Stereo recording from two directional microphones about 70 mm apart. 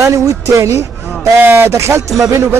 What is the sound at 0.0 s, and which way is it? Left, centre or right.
Speech, right.